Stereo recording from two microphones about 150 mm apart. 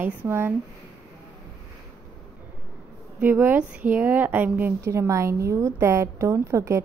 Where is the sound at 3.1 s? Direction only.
10° right (ahead or behind).